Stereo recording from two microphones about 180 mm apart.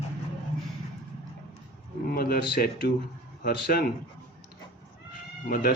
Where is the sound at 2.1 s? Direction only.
55° left (ahead or behind).